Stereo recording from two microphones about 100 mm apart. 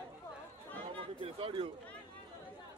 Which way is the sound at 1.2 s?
65° right (ahead or behind).